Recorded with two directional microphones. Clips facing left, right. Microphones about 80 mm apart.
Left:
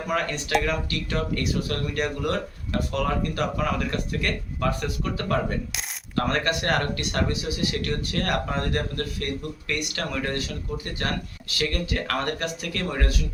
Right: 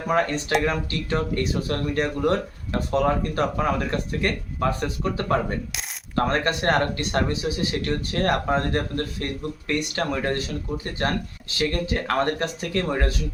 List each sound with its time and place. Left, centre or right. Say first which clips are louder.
0.1 s speech: right 3 dB; right